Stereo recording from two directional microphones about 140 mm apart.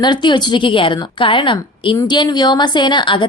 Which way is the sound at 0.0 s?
35° left (ahead or behind).